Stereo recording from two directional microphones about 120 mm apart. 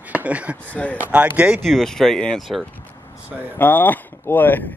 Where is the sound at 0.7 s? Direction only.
10° left (ahead or behind).